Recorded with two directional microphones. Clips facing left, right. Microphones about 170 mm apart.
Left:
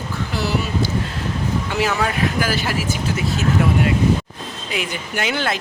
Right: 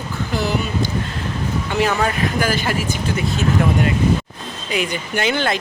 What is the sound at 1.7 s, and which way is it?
Speech, 5° left (ahead or behind).